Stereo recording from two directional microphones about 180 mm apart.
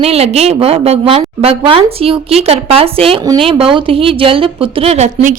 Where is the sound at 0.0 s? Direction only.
35° right (ahead or behind).